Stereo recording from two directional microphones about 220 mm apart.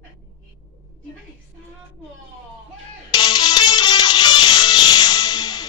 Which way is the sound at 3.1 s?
20° left (ahead or behind).